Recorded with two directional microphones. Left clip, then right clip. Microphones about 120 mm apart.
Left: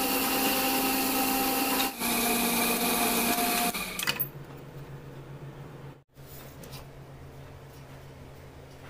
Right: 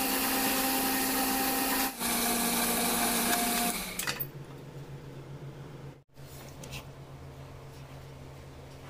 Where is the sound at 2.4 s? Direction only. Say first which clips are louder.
Left 3 dB; centre (ahead or behind).